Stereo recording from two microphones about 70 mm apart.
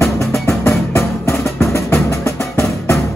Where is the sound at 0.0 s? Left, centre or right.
Left.